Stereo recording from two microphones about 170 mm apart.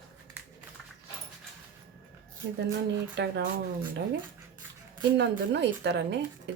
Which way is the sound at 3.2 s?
85° right.